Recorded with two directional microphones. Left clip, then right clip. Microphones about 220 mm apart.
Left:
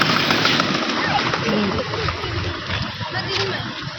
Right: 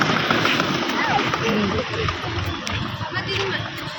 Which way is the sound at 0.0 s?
40° left (ahead or behind).